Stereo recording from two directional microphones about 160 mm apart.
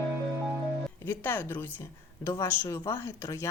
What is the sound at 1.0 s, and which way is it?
Speech, 10° left (ahead or behind).